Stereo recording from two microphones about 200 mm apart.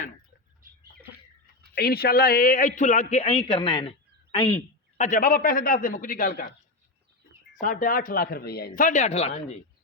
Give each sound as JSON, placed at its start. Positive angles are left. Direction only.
{"t": 0.6, "sound": "bird", "side_deg": -45}
{"t": 1.7, "sound": "a man's voice", "side_deg": 50}
{"t": 4.9, "sound": "speech", "side_deg": 40}
{"t": 7.6, "sound": "speech", "side_deg": 40}